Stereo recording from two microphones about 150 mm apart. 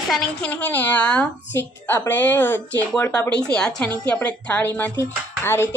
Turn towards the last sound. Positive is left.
turn(degrees=15)  # may be behind; listen again after turning